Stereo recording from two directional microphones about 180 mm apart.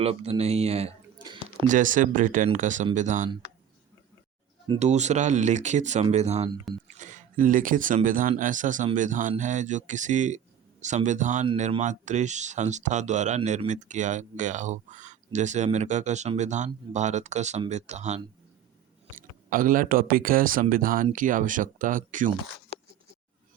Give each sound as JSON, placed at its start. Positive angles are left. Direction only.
{"t": 0.0, "sound": "speech", "side_deg": -35}
{"t": 1.6, "sound": "speech", "side_deg": -45}
{"t": 4.8, "sound": "speech", "side_deg": -40}
{"t": 19.1, "sound": "speech", "side_deg": -50}